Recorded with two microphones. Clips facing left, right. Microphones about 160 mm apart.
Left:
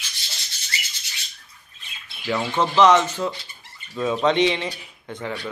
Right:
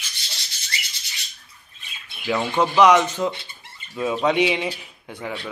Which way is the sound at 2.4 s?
10° right (ahead or behind).